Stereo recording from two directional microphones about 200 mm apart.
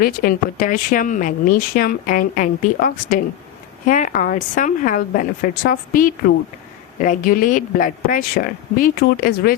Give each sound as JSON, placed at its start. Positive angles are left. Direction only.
{"t": 0.0, "sound": "a woman's voice", "side_deg": 45}